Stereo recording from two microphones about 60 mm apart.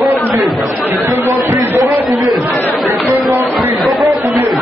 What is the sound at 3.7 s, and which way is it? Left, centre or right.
Chatter, centre.